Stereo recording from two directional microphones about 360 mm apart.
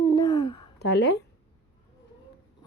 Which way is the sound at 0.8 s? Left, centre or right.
Left.